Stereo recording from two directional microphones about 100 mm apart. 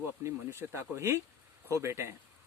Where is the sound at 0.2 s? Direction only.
30° right (ahead or behind).